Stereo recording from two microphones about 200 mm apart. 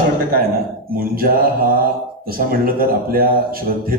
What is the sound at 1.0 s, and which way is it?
A man's voice, 45° right (ahead or behind).